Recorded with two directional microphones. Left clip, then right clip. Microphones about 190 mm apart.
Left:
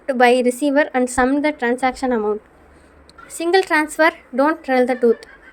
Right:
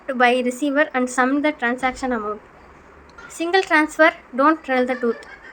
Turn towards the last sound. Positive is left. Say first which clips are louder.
# left 3 dB
turn(degrees=40)  # may be behind; listen again after turning